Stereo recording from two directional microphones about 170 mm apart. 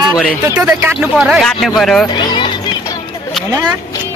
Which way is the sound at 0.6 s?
10° right (ahead or behind).